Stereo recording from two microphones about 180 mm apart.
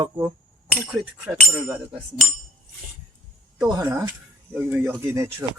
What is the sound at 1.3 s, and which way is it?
Speech, 15° right (ahead or behind).